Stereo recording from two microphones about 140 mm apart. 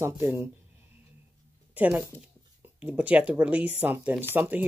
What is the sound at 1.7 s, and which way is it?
Speech, 10° right (ahead or behind).